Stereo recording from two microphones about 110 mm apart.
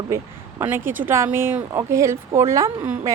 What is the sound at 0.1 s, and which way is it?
Speech, 25° right (ahead or behind).